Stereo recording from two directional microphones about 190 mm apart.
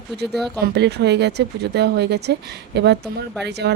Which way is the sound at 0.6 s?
60° right (ahead or behind).